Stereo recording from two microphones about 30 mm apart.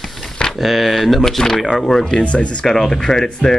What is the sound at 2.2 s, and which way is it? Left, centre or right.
Speech, left.